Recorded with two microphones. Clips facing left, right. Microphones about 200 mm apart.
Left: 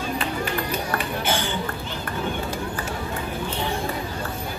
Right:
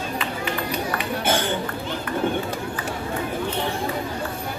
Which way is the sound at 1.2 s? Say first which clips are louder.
Right 3 dB; 50° right (ahead or behind).